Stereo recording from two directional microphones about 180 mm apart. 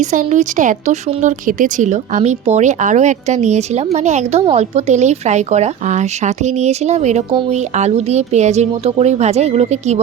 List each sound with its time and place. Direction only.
0.1 s a woman's voice: 40° right (ahead or behind)